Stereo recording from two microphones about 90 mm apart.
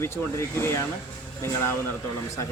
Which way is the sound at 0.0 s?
30° left (ahead or behind).